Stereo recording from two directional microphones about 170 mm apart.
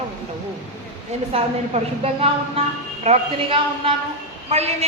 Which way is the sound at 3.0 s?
35° right (ahead or behind).